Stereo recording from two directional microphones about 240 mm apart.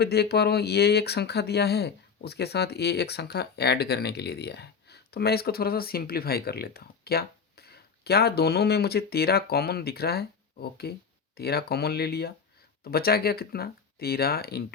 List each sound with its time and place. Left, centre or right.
0.0 s speech: left